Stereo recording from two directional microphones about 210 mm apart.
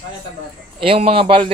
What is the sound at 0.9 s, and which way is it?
Speech, 25° right (ahead or behind).